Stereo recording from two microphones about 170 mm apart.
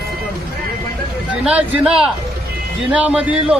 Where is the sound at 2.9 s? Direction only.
5° right (ahead or behind).